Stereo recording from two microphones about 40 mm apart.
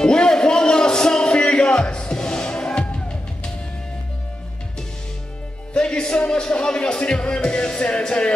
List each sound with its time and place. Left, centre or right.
0.0 s music: centre
5.7 s music: left